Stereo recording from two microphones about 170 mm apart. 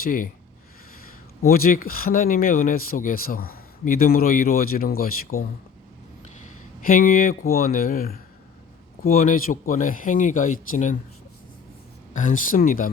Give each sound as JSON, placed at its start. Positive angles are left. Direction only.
{"t": 0.0, "sound": "speech", "side_deg": 55}
{"t": 1.4, "sound": "speech", "side_deg": 60}
{"t": 12.1, "sound": "speech", "side_deg": 50}